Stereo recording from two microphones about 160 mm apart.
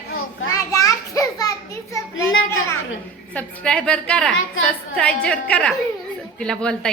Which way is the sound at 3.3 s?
5° left (ahead or behind).